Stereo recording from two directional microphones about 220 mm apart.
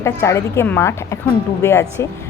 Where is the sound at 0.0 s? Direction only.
10° left (ahead or behind).